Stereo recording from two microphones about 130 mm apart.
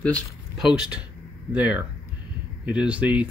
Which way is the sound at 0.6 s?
5° right (ahead or behind).